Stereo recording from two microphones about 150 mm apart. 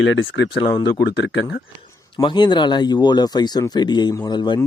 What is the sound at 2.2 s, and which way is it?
Speech, 30° left (ahead or behind).